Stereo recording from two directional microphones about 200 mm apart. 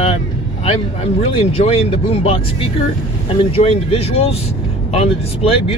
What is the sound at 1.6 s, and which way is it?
Speech, 30° left (ahead or behind).